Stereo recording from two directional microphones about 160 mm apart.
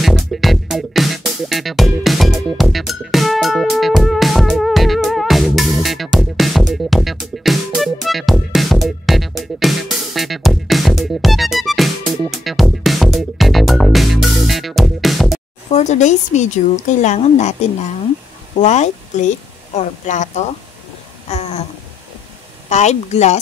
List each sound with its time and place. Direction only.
0.0 s music: centre (ahead or behind)
15.7 s a woman's voice: 45° left (ahead or behind)
21.3 s a sound: 40° left (ahead or behind)
22.7 s speech: 45° left (ahead or behind)